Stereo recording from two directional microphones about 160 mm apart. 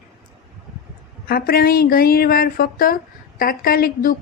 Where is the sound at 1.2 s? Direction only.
70° left (ahead or behind).